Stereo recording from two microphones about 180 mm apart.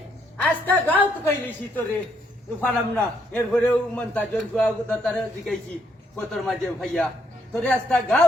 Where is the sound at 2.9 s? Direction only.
5° left (ahead or behind).